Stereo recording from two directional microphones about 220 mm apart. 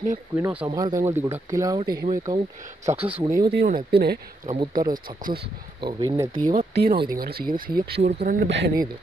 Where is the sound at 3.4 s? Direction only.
50° right (ahead or behind).